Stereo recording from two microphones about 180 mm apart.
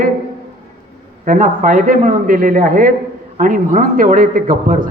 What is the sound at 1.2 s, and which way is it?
A man's voice, 45° right (ahead or behind).